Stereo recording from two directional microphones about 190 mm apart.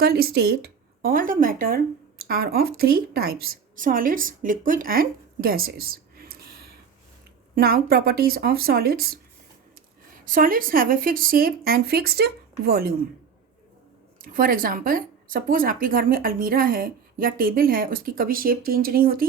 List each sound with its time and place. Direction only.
0.0 s speech: 55° right (ahead or behind)
14.2 s speech: 50° right (ahead or behind)